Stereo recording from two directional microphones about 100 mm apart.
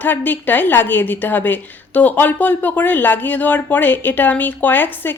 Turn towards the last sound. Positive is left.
turn(degrees=20)  # may be behind; listen again after turning